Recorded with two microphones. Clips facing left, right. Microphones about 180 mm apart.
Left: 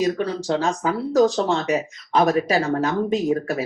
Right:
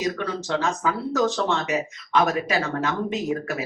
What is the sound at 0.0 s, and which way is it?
Speech, 35° left (ahead or behind).